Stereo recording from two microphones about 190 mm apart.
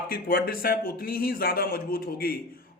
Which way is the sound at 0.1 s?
50° left (ahead or behind).